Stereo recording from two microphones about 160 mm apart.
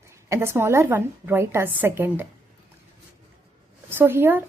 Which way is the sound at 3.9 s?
15° right (ahead or behind).